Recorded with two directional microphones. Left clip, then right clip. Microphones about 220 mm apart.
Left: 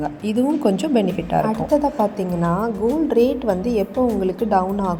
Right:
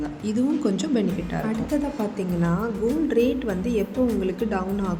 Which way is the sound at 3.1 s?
15° left (ahead or behind).